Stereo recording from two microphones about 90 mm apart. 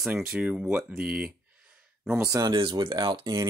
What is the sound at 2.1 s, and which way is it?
Speech, 30° right (ahead or behind).